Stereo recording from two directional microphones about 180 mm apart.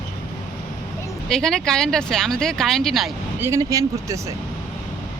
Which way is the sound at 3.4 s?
15° right (ahead or behind).